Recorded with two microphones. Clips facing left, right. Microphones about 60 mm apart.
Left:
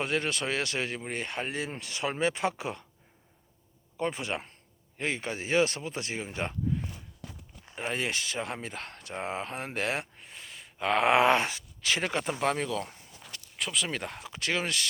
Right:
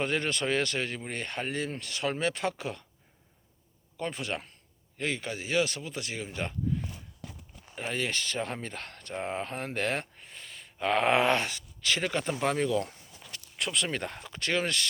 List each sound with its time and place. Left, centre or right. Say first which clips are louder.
0.0 s speech: right 1 dB; centre
3.9 s speech: left 2 dB; centre
7.8 s speech: even; centre